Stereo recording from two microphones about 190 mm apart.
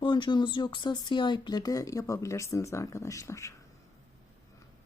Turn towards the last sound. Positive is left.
turn(degrees=15)  # may be behind; listen again after turning